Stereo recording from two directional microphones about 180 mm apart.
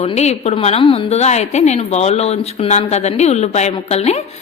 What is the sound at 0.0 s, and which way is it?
Speech, 35° left (ahead or behind).